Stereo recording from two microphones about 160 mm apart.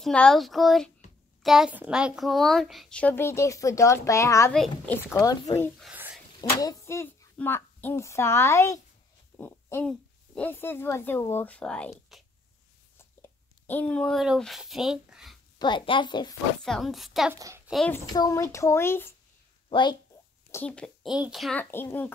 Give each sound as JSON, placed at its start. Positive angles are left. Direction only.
{"t": 0.0, "sound": "speech", "side_deg": 5}
{"t": 4.5, "sound": "speech", "side_deg": 10}
{"t": 5.1, "sound": "a woman's voice", "side_deg": 25}
{"t": 13.2, "sound": "speech", "side_deg": 10}
{"t": 15.6, "sound": "a woman's voice", "side_deg": 30}
{"t": 16.6, "sound": "speech", "side_deg": 0}
{"t": 17.3, "sound": "a child's voice", "side_deg": -15}
{"t": 18.1, "sound": "speech", "side_deg": 20}
{"t": 19.7, "sound": "a woman's voice", "side_deg": 30}
{"t": 20.5, "sound": "speech", "side_deg": 5}
{"t": 21.5, "sound": "speech", "side_deg": 15}